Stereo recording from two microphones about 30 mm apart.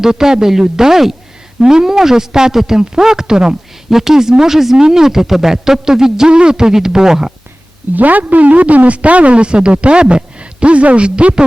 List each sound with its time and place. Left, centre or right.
0.0 s a man's voice: centre
3.8 s speech: centre
6.2 s a man's voice: right
7.9 s a woman's voice: right